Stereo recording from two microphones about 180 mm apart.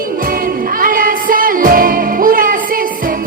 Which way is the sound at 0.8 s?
50° right (ahead or behind).